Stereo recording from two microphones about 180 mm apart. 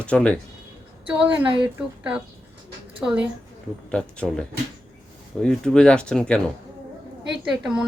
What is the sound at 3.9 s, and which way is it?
Speech, 5° left (ahead or behind).